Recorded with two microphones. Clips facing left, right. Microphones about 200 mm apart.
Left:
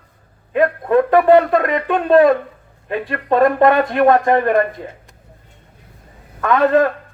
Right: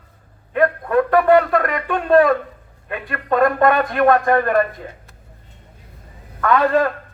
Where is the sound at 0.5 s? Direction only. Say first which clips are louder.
Left 2 dB; 25° left (ahead or behind).